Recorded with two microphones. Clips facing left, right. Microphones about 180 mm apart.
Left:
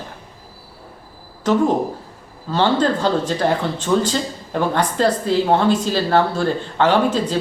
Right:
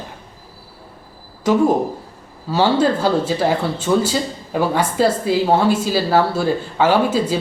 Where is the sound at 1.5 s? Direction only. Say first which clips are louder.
Right 2 dB; 10° right (ahead or behind).